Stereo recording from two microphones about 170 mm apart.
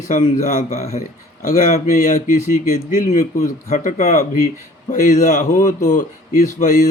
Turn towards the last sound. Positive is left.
turn(degrees=50)  # may be behind; listen again after turning